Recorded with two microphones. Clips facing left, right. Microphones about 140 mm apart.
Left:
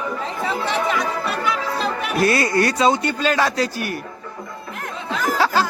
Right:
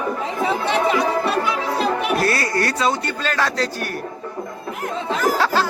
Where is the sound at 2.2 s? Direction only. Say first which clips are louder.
Left 3 dB; 20° left (ahead or behind).